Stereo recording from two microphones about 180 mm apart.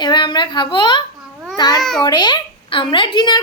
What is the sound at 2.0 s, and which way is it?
A child's voice, 25° left (ahead or behind).